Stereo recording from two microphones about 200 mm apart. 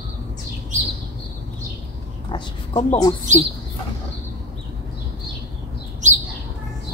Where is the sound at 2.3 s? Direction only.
30° left (ahead or behind).